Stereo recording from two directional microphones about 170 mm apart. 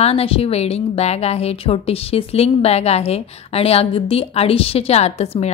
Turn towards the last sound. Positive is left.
turn(degrees=40)  # may be behind; listen again after turning